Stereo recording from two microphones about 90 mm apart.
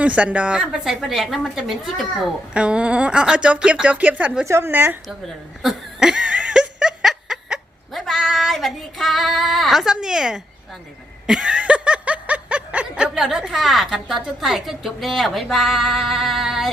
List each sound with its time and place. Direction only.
0.0 s speech: 15° right (ahead or behind)
4.4 s a woman's voice: 30° right (ahead or behind)
5.6 s laughter: 5° right (ahead or behind)
11.3 s snicker: 10° right (ahead or behind)